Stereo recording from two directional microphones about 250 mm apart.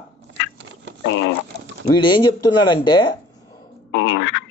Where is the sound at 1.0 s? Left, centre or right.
Left.